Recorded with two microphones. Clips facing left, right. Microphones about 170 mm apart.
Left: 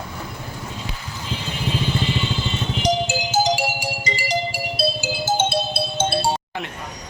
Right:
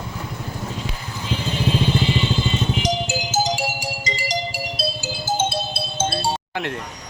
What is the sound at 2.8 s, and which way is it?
Music, 60° left (ahead or behind).